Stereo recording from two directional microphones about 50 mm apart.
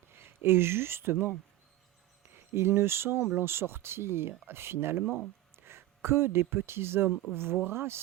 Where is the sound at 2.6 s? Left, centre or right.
Right.